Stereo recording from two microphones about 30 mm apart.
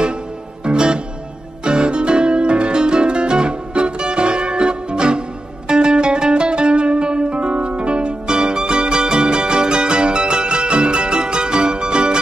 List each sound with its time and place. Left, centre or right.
0.7 s music: right